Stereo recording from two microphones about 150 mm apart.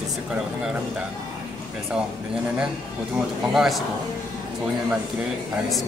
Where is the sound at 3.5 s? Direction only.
Centre (ahead or behind).